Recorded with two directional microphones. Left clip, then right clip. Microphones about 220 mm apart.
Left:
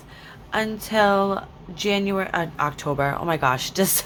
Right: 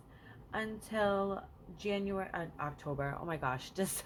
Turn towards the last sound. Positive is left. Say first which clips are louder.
# left 16 dB
turn(degrees=20)  # may be behind; listen again after turning